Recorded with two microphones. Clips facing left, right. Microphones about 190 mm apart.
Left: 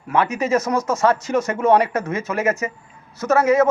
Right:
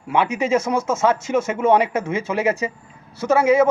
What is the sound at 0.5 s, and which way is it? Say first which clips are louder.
Speech: even; 25° right (ahead or behind).